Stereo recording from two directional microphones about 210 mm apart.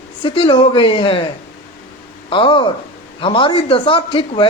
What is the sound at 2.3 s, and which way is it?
A man's voice, 25° left (ahead or behind).